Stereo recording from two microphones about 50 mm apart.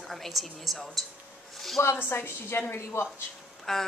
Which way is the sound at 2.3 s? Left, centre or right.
Left.